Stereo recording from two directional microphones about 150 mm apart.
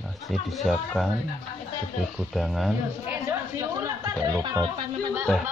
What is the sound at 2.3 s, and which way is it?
Speech, centre (ahead or behind).